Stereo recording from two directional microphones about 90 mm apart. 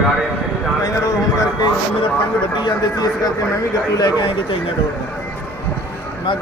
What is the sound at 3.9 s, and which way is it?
Speech, 50° left (ahead or behind).